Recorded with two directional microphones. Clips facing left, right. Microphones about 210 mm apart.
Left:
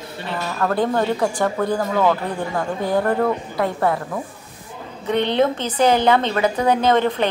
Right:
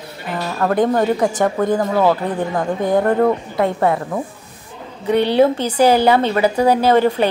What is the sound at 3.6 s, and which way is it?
Speech, 25° right (ahead or behind).